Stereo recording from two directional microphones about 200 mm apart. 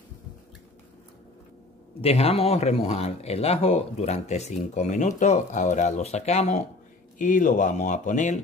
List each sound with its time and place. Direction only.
2.0 s speech: 30° left (ahead or behind)